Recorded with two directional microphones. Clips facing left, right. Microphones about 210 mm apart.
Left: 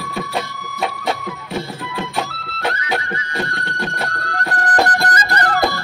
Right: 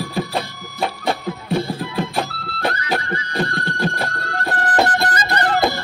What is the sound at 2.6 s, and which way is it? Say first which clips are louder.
Music: even; 35° right (ahead or behind).